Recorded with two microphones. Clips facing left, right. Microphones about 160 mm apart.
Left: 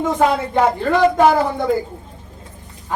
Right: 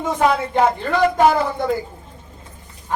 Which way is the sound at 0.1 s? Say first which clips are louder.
Right 1 dB; centre (ahead or behind).